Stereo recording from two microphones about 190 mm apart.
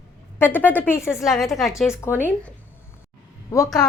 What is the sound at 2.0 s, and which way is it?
Speech, 10° left (ahead or behind).